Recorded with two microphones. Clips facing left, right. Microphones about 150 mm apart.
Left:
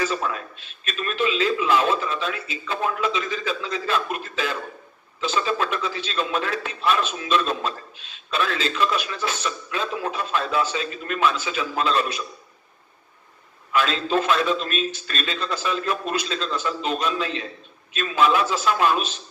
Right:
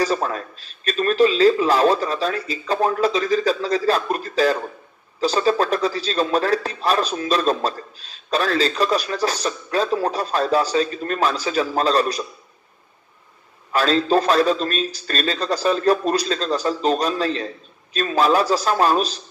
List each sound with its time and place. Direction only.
0.0 s a man's voice: 40° right (ahead or behind)
13.7 s a man's voice: 40° right (ahead or behind)